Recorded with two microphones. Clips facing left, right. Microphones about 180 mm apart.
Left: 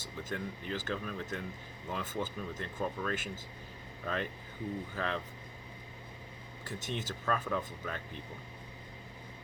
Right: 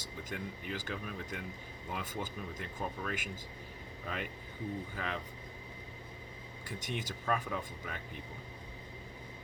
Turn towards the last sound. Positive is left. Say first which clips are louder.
# left 4 dB
turn(degrees=-10)  # may be behind; listen again after turning